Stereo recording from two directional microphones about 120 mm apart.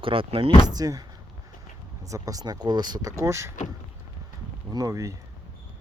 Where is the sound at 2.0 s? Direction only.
30° right (ahead or behind).